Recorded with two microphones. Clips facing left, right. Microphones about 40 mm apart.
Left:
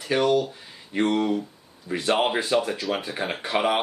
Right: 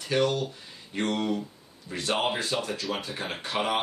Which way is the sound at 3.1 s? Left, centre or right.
Centre.